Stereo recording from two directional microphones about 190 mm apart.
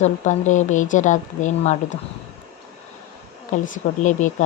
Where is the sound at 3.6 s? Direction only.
40° left (ahead or behind).